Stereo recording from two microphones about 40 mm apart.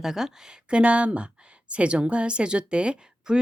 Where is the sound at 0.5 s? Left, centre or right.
Right.